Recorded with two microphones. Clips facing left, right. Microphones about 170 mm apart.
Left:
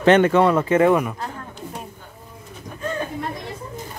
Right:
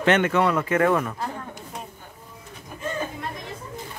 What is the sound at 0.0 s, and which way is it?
Speech, 35° left (ahead or behind).